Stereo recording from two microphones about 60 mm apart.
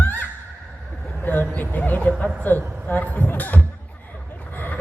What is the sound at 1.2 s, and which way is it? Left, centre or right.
Vehicle, left.